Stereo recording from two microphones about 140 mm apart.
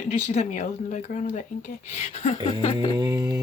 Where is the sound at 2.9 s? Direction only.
30° right (ahead or behind).